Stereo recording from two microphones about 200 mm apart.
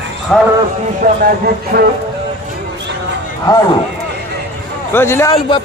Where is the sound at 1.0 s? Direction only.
45° right (ahead or behind).